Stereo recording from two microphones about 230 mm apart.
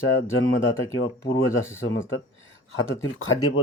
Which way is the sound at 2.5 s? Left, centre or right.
Left.